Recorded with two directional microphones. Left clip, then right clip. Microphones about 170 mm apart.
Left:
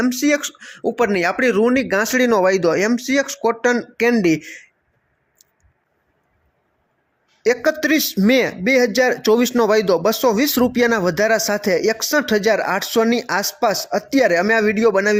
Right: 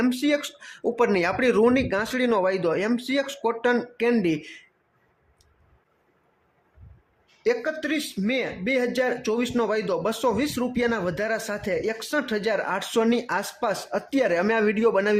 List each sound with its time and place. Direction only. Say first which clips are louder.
0.1 s speech: left 6 dB; 25° left (ahead or behind)
7.6 s speech: left 10 dB; 40° left (ahead or behind); by 15.1 s 20° left (ahead or behind)